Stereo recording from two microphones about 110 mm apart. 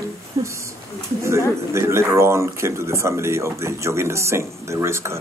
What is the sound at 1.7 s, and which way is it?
Speech, 25° right (ahead or behind).